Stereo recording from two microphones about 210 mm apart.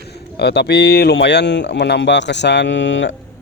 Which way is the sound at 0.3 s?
55° left (ahead or behind).